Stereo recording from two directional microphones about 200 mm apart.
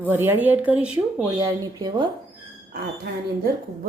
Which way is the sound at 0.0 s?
10° right (ahead or behind).